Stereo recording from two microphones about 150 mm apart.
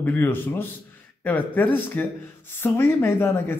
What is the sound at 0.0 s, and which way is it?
Speech, 10° left (ahead or behind).